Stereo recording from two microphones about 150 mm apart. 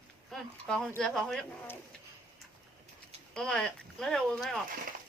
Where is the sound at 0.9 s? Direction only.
5° left (ahead or behind).